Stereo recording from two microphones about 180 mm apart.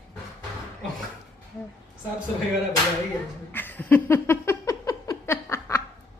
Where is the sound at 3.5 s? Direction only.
10° left (ahead or behind).